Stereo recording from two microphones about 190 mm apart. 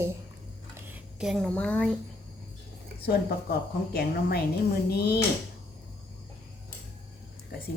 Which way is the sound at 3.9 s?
55° left (ahead or behind).